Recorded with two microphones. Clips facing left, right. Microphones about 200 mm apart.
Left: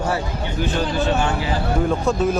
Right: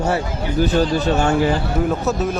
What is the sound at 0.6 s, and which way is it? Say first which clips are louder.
Speech: right 5 dB; 40° right (ahead or behind).